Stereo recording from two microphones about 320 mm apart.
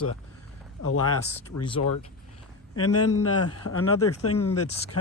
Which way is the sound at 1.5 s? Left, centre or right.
Left.